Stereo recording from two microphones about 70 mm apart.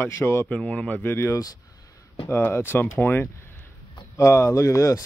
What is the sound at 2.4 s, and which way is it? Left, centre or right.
Speech, left.